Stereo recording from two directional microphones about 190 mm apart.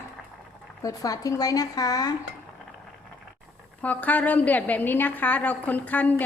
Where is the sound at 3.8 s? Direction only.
10° left (ahead or behind).